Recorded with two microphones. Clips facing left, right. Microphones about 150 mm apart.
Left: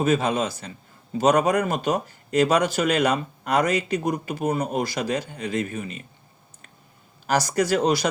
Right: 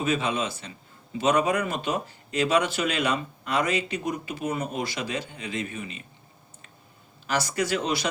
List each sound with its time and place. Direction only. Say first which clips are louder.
0.0 s speech: left 5 dB; 40° left (ahead or behind)
7.3 s speech: left 5 dB; 40° left (ahead or behind)